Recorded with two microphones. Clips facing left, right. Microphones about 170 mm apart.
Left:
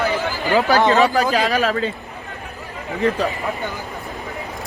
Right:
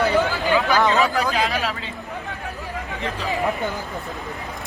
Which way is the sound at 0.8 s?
40° left (ahead or behind).